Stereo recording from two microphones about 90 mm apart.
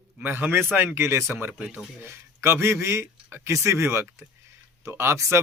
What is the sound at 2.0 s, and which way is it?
A man's voice, 30° right (ahead or behind).